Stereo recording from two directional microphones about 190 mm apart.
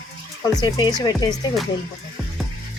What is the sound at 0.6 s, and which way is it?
Speech, 20° left (ahead or behind).